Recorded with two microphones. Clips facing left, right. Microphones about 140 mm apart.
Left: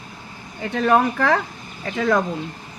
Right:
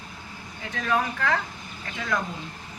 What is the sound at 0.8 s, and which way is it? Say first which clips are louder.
Speech: left 8 dB; 55° left (ahead or behind).